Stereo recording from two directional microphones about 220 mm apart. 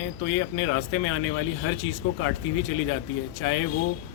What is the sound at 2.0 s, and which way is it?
Speech, 80° left.